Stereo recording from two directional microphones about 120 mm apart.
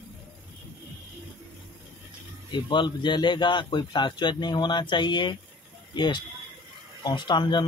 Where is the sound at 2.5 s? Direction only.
40° left (ahead or behind).